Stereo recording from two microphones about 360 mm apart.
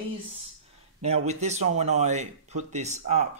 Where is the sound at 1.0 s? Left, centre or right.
Centre.